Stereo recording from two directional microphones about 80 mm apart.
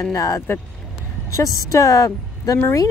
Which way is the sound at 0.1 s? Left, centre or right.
Left.